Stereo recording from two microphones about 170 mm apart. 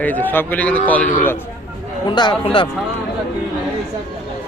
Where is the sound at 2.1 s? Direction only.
25° left (ahead or behind).